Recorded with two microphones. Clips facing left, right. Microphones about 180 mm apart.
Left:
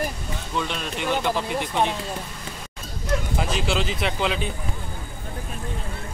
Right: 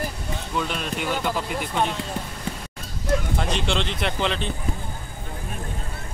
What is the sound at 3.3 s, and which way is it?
Speech, 5° left (ahead or behind).